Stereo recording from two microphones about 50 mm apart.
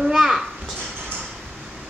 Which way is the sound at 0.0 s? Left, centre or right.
Centre.